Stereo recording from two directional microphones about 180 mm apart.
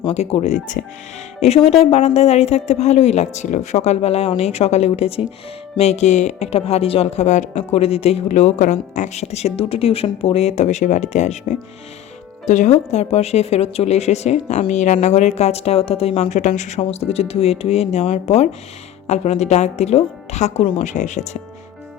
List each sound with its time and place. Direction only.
0.0 s a woman's voice: 35° left (ahead or behind)